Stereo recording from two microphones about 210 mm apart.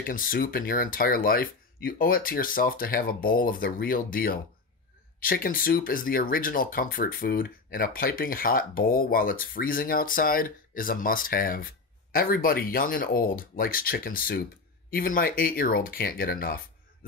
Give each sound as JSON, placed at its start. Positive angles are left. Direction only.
{"t": 0.0, "sound": "speech", "side_deg": 40}